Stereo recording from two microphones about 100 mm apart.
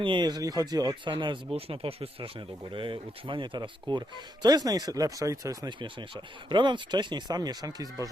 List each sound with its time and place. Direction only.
0.0 s speech: 50° right (ahead or behind)
1.1 s speech: 55° right (ahead or behind)
1.5 s speech: 70° right (ahead or behind)
2.7 s speech: 55° right (ahead or behind); by 5.5 s 35° right (ahead or behind)
5.6 s speech: 50° right (ahead or behind)